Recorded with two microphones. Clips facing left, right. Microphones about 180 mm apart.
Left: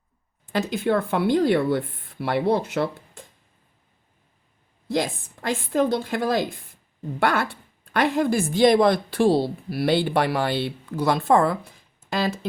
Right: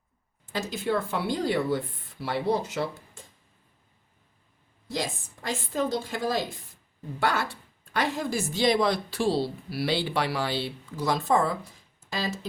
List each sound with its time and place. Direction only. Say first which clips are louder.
0.5 s speech: left 6 dB; 60° left (ahead or behind)
4.9 s speech: left 7 dB; 60° left (ahead or behind)